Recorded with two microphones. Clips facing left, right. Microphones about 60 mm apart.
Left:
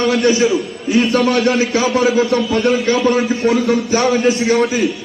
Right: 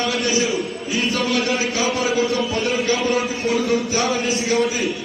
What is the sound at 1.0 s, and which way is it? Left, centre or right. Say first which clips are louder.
Speech: left 6 dB; left.